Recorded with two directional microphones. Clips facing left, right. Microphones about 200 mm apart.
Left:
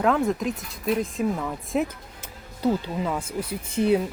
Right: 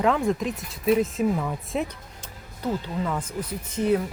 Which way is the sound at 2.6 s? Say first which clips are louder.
Left 3 dB; 10° left (ahead or behind).